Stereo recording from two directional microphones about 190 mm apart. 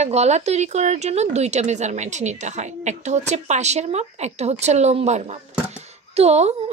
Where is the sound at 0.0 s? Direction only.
35° right (ahead or behind).